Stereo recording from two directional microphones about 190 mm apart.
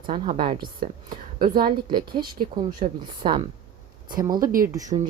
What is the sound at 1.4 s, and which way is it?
Speech, 50° right (ahead or behind).